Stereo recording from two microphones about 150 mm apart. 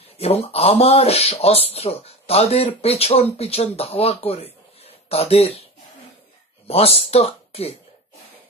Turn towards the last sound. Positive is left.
turn(degrees=40)  # may be behind; listen again after turning